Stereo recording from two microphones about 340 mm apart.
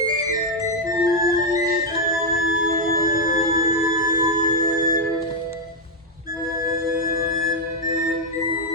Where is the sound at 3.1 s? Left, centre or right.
Left.